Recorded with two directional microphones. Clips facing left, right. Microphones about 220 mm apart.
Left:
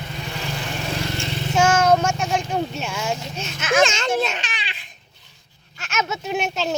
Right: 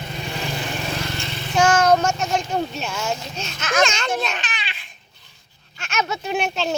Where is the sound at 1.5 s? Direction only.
10° left (ahead or behind).